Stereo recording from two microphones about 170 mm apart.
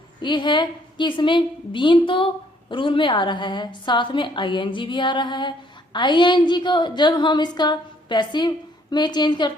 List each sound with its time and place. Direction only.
0.2 s a woman's voice: 25° left (ahead or behind)